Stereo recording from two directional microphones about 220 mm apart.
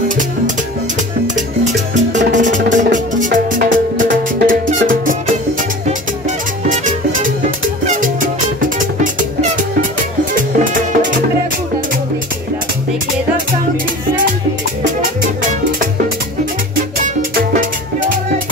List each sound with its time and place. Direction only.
2.0 s music: 35° right (ahead or behind)
6.7 s music: 35° right (ahead or behind)
16.7 s music: 40° right (ahead or behind)